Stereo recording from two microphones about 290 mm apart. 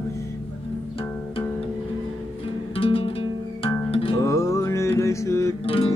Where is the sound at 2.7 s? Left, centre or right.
Centre.